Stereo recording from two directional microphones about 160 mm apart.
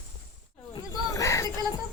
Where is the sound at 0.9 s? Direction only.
20° left (ahead or behind).